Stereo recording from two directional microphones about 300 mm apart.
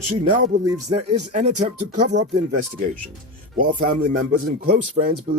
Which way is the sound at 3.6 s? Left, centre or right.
Right.